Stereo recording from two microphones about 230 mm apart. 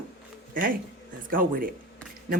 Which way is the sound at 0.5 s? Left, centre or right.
Right.